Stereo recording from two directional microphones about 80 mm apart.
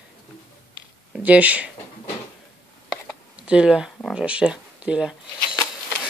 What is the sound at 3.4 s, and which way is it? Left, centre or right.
Speech, centre.